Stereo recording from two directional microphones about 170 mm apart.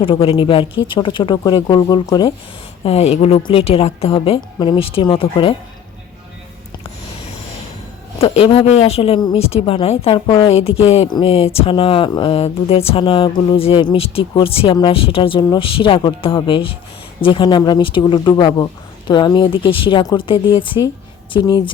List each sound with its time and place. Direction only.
0.0 s a woman's voice: 35° left (ahead or behind)
2.8 s a woman's voice: 35° left (ahead or behind)
8.2 s a woman's voice: 35° left (ahead or behind)